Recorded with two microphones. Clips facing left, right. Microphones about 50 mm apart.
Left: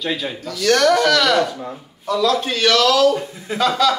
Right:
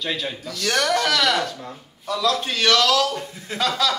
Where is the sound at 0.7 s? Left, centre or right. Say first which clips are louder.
Left 6 dB; centre.